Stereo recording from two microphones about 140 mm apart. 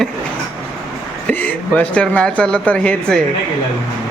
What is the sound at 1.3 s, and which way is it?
Speech, 10° left (ahead or behind).